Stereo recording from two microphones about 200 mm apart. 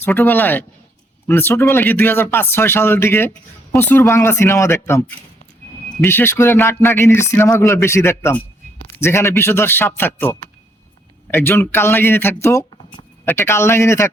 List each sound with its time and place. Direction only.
0.0 s speech: 10° left (ahead or behind)